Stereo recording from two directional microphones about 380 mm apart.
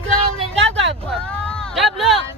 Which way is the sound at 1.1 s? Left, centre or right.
Centre.